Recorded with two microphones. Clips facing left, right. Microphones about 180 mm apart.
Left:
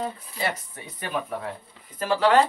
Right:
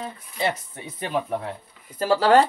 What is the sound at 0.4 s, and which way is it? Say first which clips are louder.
Speech: right 4 dB; 25° right (ahead or behind).